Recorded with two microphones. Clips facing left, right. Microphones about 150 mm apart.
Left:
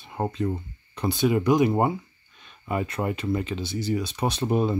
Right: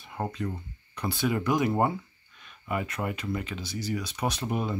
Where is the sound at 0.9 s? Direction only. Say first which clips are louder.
Left 6 dB; 20° left (ahead or behind).